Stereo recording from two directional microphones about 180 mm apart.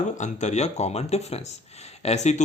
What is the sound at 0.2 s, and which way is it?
Speech, 40° left (ahead or behind).